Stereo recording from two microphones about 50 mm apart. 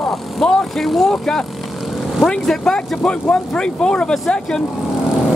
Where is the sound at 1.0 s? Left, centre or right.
Centre.